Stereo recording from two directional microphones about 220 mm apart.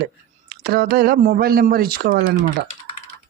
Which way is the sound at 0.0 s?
45° right (ahead or behind).